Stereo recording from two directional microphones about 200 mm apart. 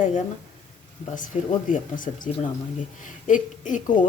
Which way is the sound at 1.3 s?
35° left (ahead or behind).